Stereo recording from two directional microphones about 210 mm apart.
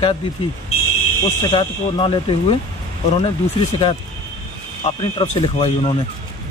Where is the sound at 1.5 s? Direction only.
25° left (ahead or behind).